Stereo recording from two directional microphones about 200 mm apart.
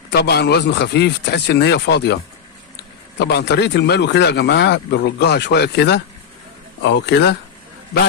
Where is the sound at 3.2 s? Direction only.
55° left (ahead or behind).